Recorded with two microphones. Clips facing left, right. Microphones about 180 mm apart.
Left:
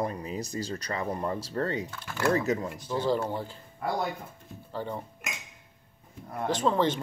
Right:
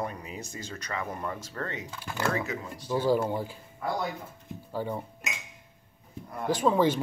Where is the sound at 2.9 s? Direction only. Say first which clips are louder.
Right 3 dB; 10° right (ahead or behind).